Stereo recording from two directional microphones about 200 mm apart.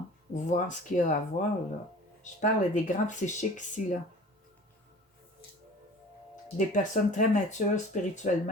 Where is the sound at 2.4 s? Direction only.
35° left (ahead or behind).